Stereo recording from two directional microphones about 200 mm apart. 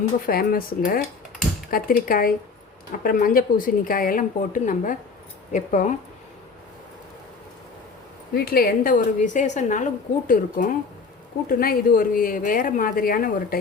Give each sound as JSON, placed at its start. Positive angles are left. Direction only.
{"t": 0.3, "sound": "a woman's voice", "side_deg": 45}
{"t": 8.3, "sound": "a woman's voice", "side_deg": 50}